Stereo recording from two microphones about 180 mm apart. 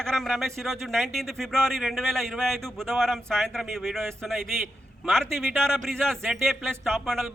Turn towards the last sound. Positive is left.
turn(degrees=0)  # may be behind; listen again after turning